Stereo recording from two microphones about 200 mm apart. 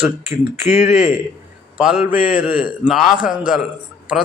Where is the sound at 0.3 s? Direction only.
35° left (ahead or behind).